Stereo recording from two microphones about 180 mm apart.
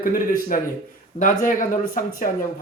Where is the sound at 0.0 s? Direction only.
50° left (ahead or behind).